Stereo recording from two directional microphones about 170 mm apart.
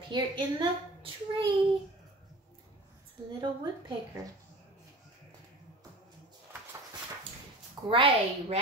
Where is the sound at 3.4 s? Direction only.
25° right (ahead or behind).